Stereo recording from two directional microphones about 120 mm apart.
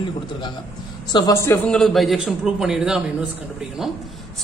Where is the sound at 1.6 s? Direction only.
5° left (ahead or behind).